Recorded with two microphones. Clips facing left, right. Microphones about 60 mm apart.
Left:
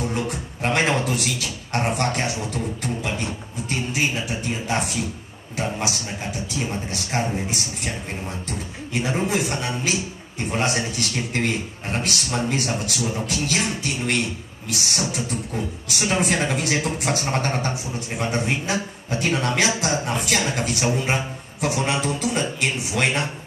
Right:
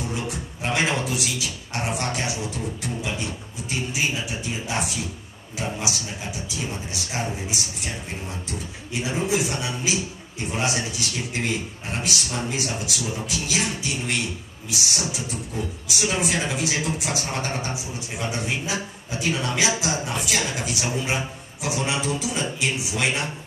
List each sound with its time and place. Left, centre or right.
0.0 s speech: left